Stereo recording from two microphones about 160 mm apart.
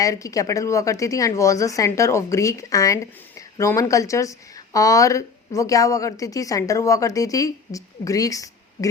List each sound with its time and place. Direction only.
0.0 s speech: 20° left (ahead or behind)